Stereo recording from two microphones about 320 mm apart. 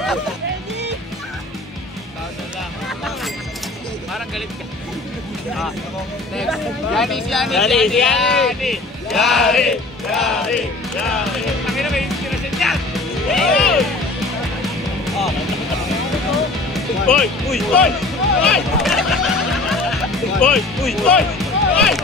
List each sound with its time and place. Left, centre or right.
6.3 s speech: centre
11.6 s speech: centre
16.7 s speech: centre
18.4 s music: centre